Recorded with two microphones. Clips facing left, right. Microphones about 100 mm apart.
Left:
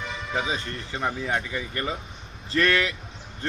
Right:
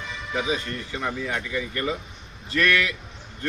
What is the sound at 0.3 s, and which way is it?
Speech, 30° left (ahead or behind).